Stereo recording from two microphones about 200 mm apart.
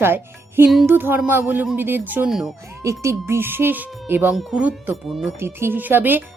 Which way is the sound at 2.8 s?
15° right (ahead or behind).